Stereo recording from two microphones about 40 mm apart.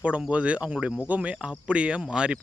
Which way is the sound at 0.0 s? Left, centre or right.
Right.